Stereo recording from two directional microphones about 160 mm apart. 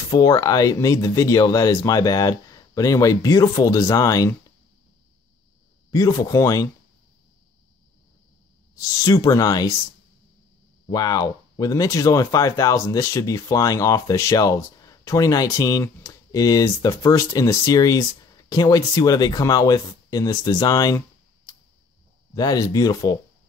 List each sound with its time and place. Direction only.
0.1 s speech: 20° left (ahead or behind)
5.9 s speech: 20° left (ahead or behind)
8.7 s speech: 20° left (ahead or behind)
10.9 s speech: 25° left (ahead or behind)
21.5 s tick-tock: 20° left (ahead or behind)
22.3 s speech: 25° left (ahead or behind)